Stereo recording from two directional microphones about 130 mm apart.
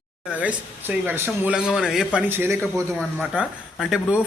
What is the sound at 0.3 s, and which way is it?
Speech, 10° right (ahead or behind).